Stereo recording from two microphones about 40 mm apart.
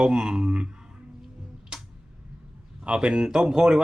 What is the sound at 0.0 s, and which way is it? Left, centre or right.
Speech, right.